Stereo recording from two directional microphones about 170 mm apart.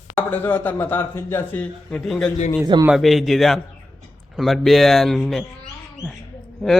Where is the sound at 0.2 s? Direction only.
10° left (ahead or behind).